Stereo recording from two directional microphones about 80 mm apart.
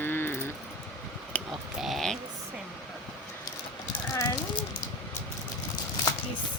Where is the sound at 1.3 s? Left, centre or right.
Centre.